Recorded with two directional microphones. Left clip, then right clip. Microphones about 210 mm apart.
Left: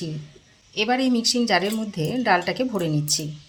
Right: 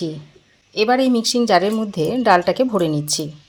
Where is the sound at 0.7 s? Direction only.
35° right (ahead or behind).